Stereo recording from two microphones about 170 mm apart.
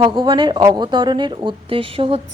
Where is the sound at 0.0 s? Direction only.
30° right (ahead or behind).